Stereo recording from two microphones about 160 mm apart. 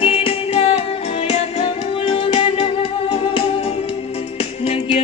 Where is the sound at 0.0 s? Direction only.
35° left (ahead or behind).